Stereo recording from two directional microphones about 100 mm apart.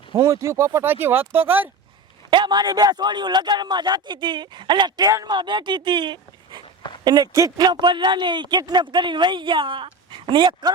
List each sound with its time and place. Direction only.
0.1 s speech: 30° right (ahead or behind)
2.3 s speech: 45° right (ahead or behind)
7.7 s speech: 50° right (ahead or behind)